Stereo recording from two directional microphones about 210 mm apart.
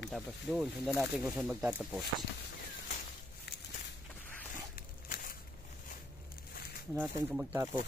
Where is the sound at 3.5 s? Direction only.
50° left (ahead or behind).